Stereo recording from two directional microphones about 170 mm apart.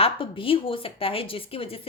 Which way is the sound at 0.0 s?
30° left (ahead or behind).